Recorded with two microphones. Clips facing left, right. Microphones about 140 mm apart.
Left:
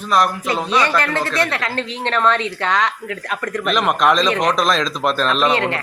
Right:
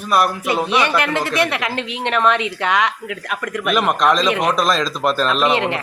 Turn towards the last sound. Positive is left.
turn(degrees=-15)  # may be behind; listen again after turning